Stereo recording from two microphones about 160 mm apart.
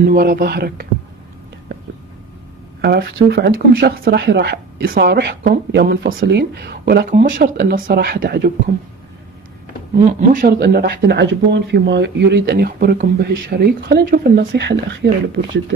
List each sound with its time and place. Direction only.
0.0 s speech: 70° right (ahead or behind)
2.8 s speech: 90° right; by 8.5 s 70° right (ahead or behind)
10.3 s speech: 85° right